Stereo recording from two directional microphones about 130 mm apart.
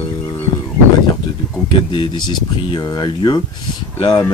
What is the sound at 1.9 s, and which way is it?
Speech, 35° left (ahead or behind).